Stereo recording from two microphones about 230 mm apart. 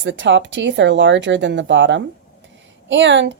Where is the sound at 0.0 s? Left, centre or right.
Right.